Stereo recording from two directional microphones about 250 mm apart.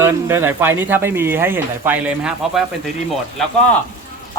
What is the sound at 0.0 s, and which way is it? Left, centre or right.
Speech, centre.